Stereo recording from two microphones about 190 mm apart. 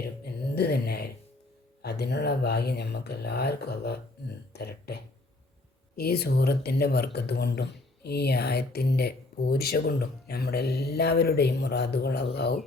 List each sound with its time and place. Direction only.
0.5 s speech: 60° left (ahead or behind)